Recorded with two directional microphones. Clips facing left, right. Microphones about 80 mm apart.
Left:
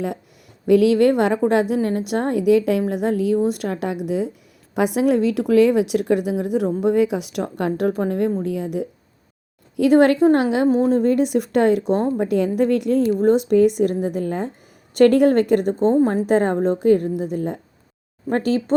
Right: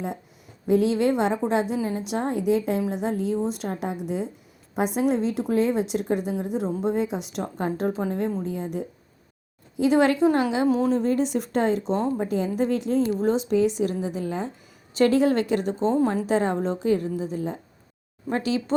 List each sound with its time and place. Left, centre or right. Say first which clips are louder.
0.7 s a woman's voice: left 6 dB; left
9.7 s a woman's voice: left 6 dB; left
10.7 s a woman's voice: left 5 dB; left